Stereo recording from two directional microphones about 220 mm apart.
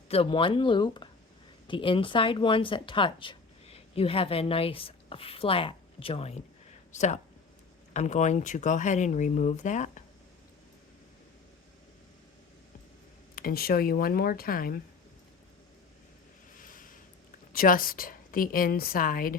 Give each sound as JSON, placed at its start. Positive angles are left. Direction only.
{"t": 0.1, "sound": "speech", "side_deg": 25}
{"t": 13.3, "sound": "speech", "side_deg": 40}
{"t": 16.6, "sound": "a sound", "side_deg": 40}
{"t": 17.5, "sound": "speech", "side_deg": 40}